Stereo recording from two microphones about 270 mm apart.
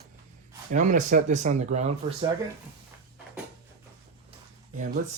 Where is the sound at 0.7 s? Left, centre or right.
Right.